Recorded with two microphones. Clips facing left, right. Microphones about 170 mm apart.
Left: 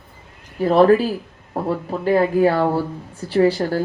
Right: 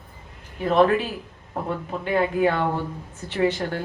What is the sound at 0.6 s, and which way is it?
Speech, 35° left (ahead or behind).